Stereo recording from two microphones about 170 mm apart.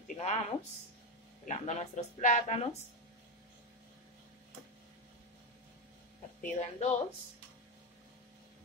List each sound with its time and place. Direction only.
0.1 s a woman's voice: 40° left (ahead or behind)
6.4 s a woman's voice: 45° left (ahead or behind)